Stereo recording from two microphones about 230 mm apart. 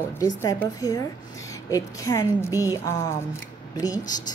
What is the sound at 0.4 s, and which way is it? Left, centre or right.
A woman's voice, centre.